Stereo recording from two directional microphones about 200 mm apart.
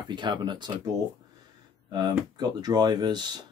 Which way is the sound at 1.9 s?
20° right (ahead or behind).